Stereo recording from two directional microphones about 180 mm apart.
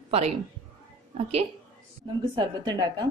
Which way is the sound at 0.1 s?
35° right (ahead or behind).